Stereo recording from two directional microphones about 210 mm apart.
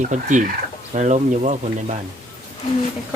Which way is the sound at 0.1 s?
35° right (ahead or behind).